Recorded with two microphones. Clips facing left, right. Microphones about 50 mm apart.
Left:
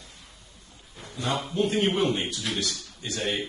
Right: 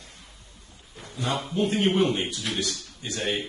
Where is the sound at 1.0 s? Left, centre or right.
Centre.